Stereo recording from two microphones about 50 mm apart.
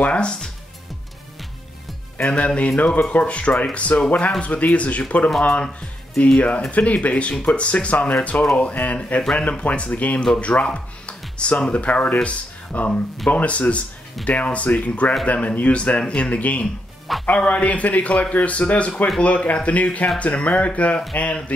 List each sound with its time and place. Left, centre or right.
0.0 s speech: left
2.3 s speech: left